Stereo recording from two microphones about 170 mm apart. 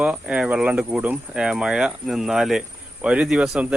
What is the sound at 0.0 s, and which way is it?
Speech, 5° right (ahead or behind).